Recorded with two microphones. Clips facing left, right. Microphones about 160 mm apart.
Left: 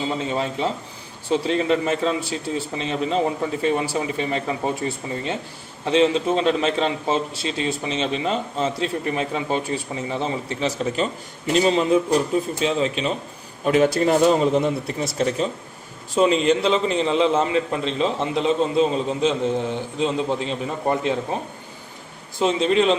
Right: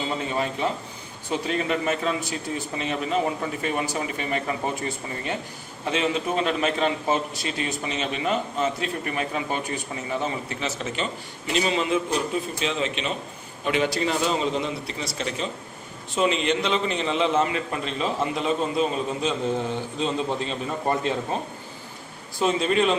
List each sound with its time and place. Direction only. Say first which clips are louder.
0.2 s a man's voice: left 2 dB; 25° left (ahead or behind); by 15.4 s 50° left (ahead or behind)
16.1 s a man's voice: left 5 dB; 35° left (ahead or behind); by 21.2 s 15° left (ahead or behind)
22.4 s a man's voice: left 3 dB; 20° left (ahead or behind)